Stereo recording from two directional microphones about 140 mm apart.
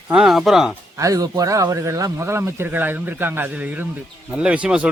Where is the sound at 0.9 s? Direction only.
25° right (ahead or behind); by 4.9 s 10° right (ahead or behind).